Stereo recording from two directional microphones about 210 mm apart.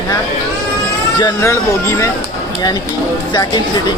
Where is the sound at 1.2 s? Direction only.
15° left (ahead or behind).